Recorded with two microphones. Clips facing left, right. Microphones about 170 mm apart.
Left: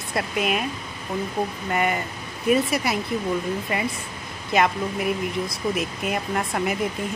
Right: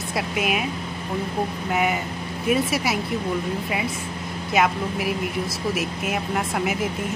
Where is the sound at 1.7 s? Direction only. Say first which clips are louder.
Right 1 dB; 5° right (ahead or behind).